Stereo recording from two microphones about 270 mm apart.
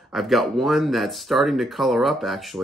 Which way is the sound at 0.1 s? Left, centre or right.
Centre.